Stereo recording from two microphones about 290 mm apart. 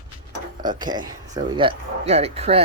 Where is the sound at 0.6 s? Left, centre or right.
Centre.